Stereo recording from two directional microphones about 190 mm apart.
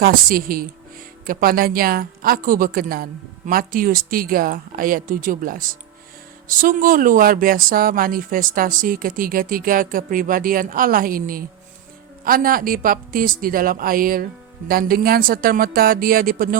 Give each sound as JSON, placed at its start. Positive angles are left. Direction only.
{"t": 0.0, "sound": "speech", "side_deg": -50}